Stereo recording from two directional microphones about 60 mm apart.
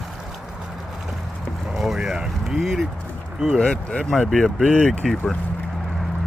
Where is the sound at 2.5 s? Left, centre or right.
Centre.